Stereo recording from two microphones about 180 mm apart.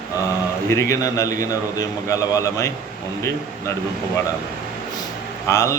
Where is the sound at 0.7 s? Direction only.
15° left (ahead or behind).